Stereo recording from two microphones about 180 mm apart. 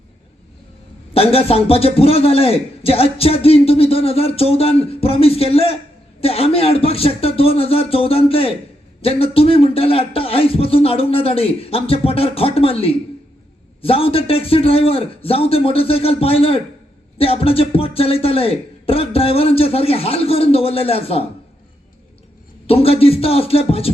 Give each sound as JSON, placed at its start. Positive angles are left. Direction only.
{"t": 1.1, "sound": "a man's voice", "side_deg": 35}
{"t": 22.6, "sound": "a man's voice", "side_deg": 35}